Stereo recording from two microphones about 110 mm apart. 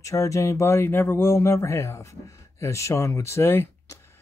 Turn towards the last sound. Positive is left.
turn(degrees=20)  # may be behind; listen again after turning